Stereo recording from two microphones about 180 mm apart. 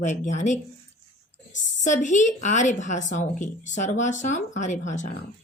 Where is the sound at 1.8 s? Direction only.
45° left (ahead or behind).